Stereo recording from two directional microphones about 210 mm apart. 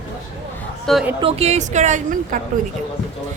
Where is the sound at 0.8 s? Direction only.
Centre (ahead or behind).